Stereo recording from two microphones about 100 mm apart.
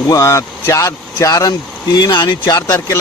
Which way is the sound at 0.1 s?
30° left (ahead or behind).